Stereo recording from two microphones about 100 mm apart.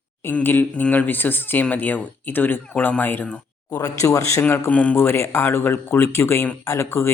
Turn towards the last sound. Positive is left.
turn(degrees=25)  # may be behind; listen again after turning